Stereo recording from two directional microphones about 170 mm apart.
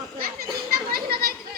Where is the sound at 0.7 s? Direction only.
60° right (ahead or behind).